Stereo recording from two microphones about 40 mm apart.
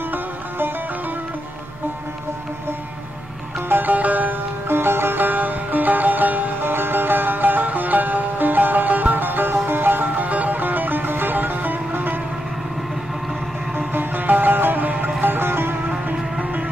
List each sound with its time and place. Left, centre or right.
3.6 s music: right
4.6 s music: right
6.6 s music: right
13.9 s music: right
16.1 s music: right